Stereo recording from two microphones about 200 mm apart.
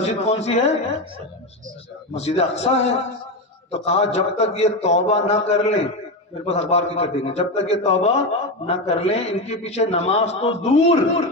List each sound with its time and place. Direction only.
0.0 s a man's voice: 30° left (ahead or behind)
2.1 s a man's voice: 30° left (ahead or behind)